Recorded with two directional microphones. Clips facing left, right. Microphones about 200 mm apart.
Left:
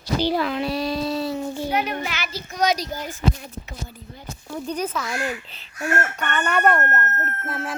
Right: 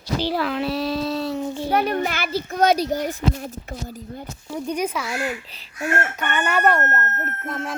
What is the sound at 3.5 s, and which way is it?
Speech, 45° right (ahead or behind).